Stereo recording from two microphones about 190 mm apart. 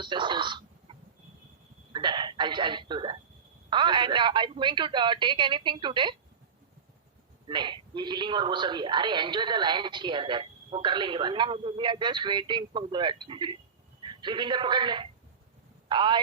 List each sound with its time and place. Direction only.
0.0 s throat clearing: 25° right (ahead or behind)
3.7 s a man's voice: 25° right (ahead or behind)
7.4 s a man's voice: 25° right (ahead or behind)